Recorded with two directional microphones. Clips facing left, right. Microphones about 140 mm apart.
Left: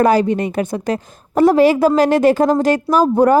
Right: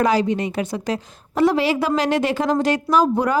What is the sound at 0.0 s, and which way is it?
A woman's voice, 50° left (ahead or behind).